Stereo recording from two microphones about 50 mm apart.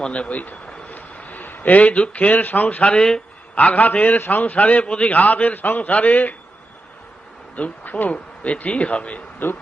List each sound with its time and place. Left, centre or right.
0.0 s a man's voice: left
3.5 s a man's voice: left
7.5 s speech: left